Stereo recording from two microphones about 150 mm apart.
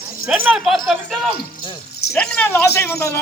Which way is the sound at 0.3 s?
5° right (ahead or behind).